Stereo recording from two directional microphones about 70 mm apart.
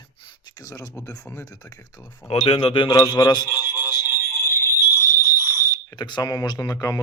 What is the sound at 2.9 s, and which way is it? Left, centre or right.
Speech, left.